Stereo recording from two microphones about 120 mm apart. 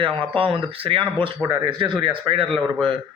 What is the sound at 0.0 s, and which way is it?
Speech, 50° right (ahead or behind).